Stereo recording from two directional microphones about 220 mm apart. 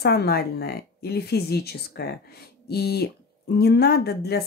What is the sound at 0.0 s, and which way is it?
Speech, 45° left (ahead or behind).